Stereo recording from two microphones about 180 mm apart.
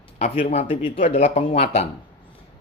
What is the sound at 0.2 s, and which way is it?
Speech, 35° left (ahead or behind).